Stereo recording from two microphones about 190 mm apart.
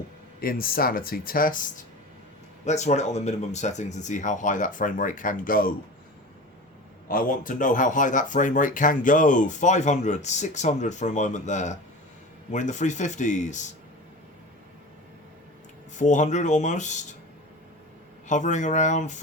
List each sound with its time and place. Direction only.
0.4 s speech: 50° left (ahead or behind)
2.6 s speech: 35° left (ahead or behind)
7.1 s speech: 45° left (ahead or behind)
16.0 s speech: 40° left (ahead or behind)
18.3 s speech: 40° left (ahead or behind)